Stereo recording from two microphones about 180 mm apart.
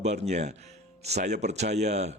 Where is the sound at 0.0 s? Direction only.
40° right (ahead or behind).